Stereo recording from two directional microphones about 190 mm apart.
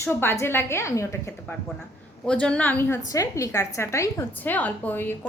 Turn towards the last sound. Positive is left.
turn(degrees=10)  # may be behind; listen again after turning